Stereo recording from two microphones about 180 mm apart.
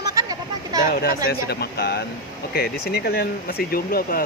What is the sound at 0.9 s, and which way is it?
Speech, 60° left (ahead or behind).